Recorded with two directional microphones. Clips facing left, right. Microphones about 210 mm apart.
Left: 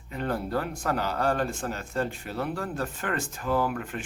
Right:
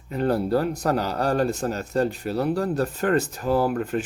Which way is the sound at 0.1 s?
40° right (ahead or behind).